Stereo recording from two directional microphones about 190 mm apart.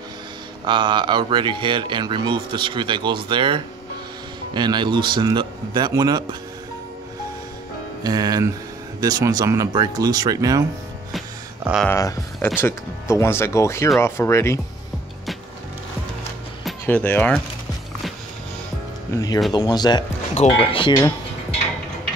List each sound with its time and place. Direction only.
0.7 s speech: 25° right (ahead or behind)
8.0 s speech: 20° right (ahead or behind)
11.8 s speech: 10° left (ahead or behind)
16.8 s speech: 10° left (ahead or behind)
19.5 s speech: 20° left (ahead or behind)